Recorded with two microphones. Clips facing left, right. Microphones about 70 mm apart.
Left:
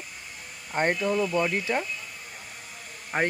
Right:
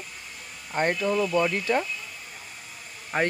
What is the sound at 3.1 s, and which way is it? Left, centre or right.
Speech, centre.